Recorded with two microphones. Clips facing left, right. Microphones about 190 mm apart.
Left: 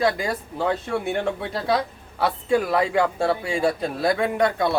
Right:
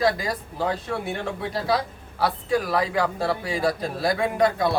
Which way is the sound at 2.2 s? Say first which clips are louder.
Left 2 dB; 25° left (ahead or behind).